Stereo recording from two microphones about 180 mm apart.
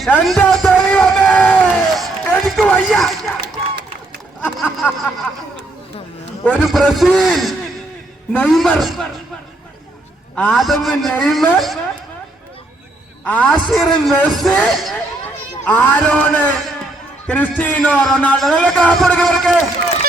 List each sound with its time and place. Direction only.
0.0 s a sound: centre (ahead or behind)
3.4 s run: 70° right (ahead or behind)
4.4 s a sound: 10° left (ahead or behind)
6.4 s speech: 5° left (ahead or behind)
10.3 s speech: 5° left (ahead or behind)
13.2 s a man's voice: 10° left (ahead or behind)